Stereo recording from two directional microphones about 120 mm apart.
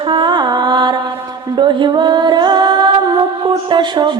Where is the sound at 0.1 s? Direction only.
40° right (ahead or behind).